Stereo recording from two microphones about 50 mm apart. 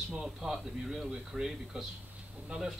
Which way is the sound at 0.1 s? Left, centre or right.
Centre.